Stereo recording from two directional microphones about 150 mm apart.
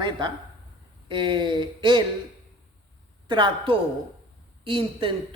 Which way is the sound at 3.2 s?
35° right (ahead or behind).